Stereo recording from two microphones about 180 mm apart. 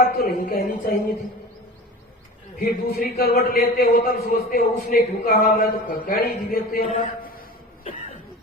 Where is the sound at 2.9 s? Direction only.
55° left (ahead or behind).